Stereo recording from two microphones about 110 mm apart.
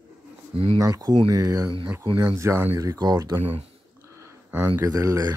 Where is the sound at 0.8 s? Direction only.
35° right (ahead or behind).